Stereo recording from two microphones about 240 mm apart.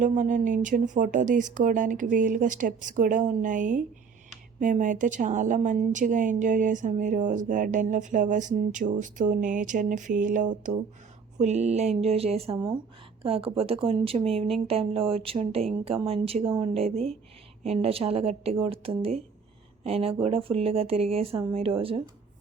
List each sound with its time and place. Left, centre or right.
0.0 s a woman's voice: right